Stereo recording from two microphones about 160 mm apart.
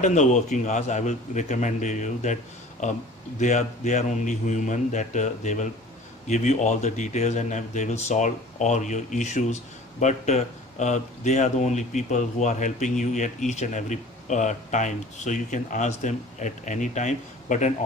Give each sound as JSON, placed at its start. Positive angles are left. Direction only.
{"t": 0.0, "sound": "speech", "side_deg": 50}